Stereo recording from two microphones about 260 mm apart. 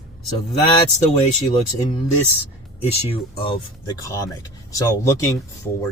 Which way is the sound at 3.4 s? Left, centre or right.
Centre.